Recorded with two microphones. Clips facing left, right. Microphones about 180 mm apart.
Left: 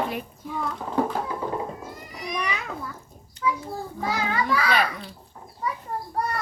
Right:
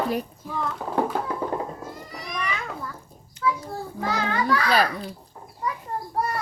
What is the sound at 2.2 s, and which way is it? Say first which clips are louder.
Children playing: left 2 dB; 20° left (ahead or behind).